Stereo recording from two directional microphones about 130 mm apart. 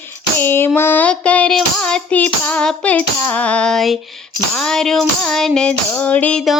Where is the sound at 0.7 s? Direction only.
15° left (ahead or behind).